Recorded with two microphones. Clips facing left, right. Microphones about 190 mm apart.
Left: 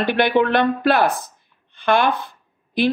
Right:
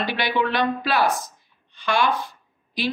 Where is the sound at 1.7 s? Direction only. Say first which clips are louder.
Left 4 dB; 55° left (ahead or behind).